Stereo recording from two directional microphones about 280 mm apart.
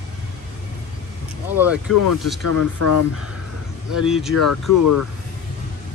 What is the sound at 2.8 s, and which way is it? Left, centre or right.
Speech, left.